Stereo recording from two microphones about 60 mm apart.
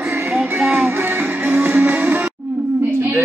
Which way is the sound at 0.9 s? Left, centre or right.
Right.